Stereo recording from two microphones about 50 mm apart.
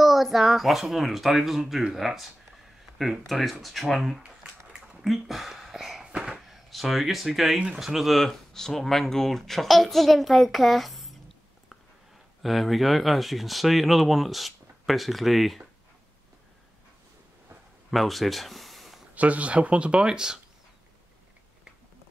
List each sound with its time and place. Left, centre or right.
0.0 s speech: centre
4.2 s a sound: right
5.0 s a sound: centre
6.5 s speech: centre
7.5 s speech: right
7.8 s speech: centre
8.2 s speech: centre
12.4 s speech: centre
17.9 s a sound: centre
19.1 s speech: right